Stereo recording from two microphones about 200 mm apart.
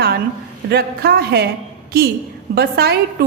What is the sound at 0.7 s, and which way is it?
Speech, 50° right (ahead or behind).